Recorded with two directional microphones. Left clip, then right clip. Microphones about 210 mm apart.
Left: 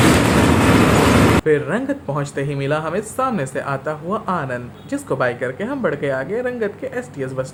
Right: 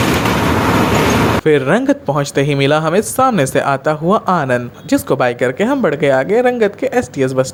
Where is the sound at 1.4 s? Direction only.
40° right (ahead or behind).